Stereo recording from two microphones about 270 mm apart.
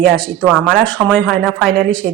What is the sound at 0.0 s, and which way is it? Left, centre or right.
Speech, centre.